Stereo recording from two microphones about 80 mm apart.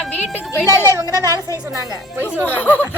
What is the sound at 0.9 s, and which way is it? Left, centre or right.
Speech, right.